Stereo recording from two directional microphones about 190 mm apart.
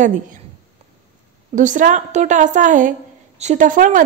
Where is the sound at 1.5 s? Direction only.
40° right (ahead or behind).